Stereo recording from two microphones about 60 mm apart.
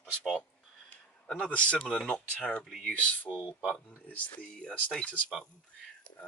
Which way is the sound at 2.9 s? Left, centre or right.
Left.